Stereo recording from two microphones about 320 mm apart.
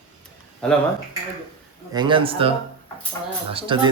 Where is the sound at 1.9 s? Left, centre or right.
Centre.